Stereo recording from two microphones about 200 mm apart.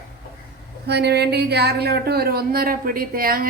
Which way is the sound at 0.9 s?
55° right (ahead or behind).